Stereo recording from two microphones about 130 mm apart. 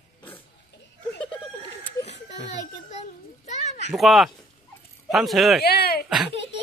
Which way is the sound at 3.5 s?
60° left (ahead or behind).